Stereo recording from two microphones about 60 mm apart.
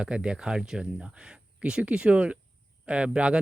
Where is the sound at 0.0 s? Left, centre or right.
Centre.